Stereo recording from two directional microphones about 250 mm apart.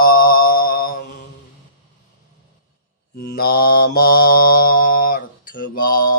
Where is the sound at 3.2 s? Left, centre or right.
Left.